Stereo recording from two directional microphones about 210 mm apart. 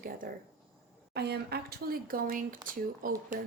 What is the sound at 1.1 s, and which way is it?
Speech, 50° right (ahead or behind).